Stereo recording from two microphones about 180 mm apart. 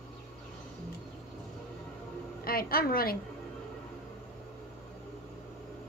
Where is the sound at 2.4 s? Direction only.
55° left (ahead or behind).